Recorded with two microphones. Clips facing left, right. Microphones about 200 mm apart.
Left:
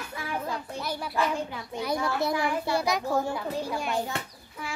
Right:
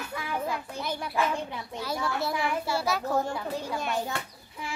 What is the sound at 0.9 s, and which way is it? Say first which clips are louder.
A child's voice: even; 10° left (ahead or behind).